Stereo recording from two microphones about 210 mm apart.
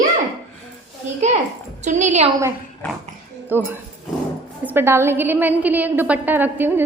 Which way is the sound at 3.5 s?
10° right (ahead or behind).